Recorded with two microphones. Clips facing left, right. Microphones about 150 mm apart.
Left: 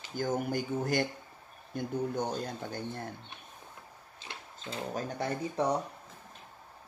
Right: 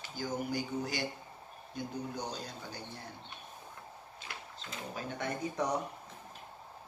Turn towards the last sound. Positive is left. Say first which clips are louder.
# left 4 dB
turn(degrees=30)  # may be behind; listen again after turning